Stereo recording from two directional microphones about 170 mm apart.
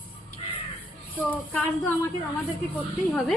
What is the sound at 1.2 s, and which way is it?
Speech, 10° left (ahead or behind).